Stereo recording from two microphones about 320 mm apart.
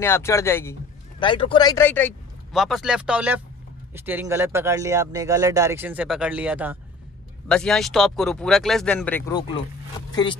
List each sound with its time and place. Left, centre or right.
0.0 s speech: centre